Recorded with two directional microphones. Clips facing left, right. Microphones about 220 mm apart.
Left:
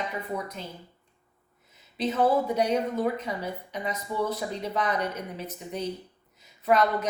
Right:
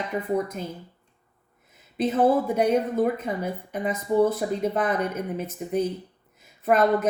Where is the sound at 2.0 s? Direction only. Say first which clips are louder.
Right 3 dB; 50° right (ahead or behind).